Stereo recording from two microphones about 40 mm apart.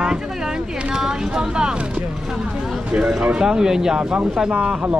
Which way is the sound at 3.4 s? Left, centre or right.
Centre.